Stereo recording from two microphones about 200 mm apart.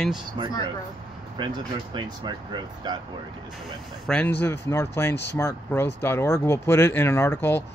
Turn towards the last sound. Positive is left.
turn(degrees=10)  # may be behind; listen again after turning